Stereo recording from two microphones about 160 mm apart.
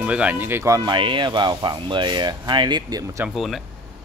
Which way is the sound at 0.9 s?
30° right (ahead or behind).